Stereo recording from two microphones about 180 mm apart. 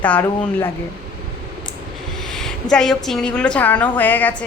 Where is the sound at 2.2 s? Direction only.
5° left (ahead or behind).